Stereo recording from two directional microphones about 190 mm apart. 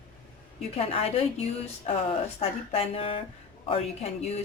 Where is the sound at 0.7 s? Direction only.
30° left (ahead or behind).